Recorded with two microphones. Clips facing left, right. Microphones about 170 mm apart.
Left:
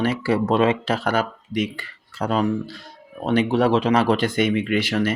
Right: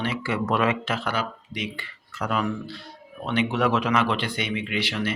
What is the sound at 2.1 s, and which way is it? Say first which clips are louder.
Speech: left 5 dB; 30° left (ahead or behind).